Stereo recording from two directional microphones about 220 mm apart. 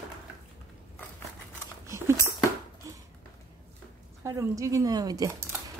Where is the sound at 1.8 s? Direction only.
10° right (ahead or behind).